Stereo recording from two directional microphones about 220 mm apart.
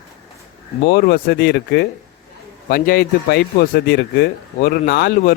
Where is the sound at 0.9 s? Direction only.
45° left (ahead or behind).